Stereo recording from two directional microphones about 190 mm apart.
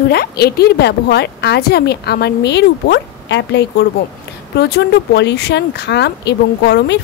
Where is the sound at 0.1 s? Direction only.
55° left (ahead or behind).